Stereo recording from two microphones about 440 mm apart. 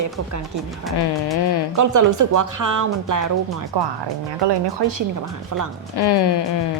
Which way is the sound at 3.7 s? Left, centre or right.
Right.